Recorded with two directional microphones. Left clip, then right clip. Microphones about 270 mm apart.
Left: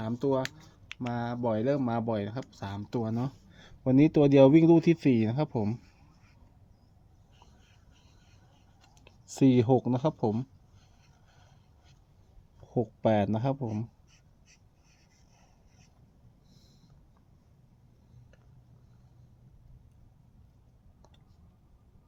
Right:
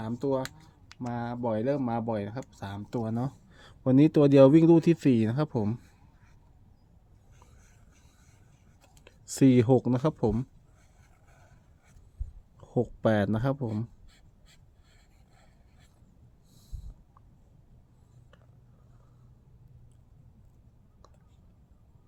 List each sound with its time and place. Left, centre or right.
0.0 s speech: centre
9.0 s speech: centre
12.5 s speech: centre